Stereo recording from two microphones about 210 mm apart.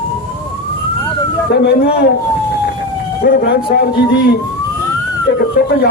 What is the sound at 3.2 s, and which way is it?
A man's voice, 45° left (ahead or behind).